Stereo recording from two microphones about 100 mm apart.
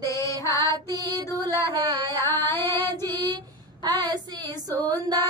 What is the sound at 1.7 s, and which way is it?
Music, 40° right (ahead or behind).